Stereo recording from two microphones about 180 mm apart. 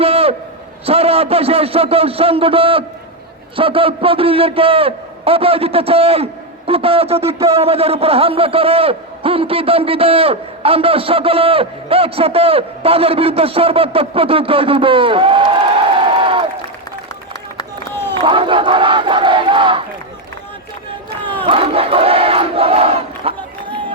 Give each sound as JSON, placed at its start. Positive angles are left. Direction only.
{"t": 0.0, "sound": "a sound", "side_deg": -35}
{"t": 0.9, "sound": "a man's voice", "side_deg": -35}
{"t": 16.0, "sound": "crowd", "side_deg": -30}
{"t": 17.6, "sound": "run", "side_deg": 15}
{"t": 18.2, "sound": "battle cry", "side_deg": -30}
{"t": 21.4, "sound": "crowd", "side_deg": -30}